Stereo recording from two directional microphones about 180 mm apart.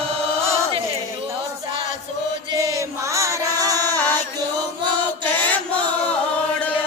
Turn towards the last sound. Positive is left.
turn(degrees=10)  # may be behind; listen again after turning